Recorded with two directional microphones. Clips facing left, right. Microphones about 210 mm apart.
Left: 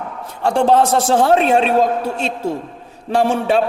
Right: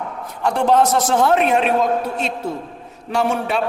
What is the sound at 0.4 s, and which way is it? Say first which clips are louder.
A man's voice: left 2 dB; 30° left (ahead or behind).